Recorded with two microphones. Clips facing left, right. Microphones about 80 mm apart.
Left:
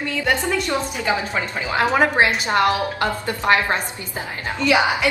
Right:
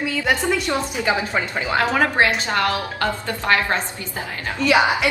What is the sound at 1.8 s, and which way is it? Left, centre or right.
A woman's voice, left.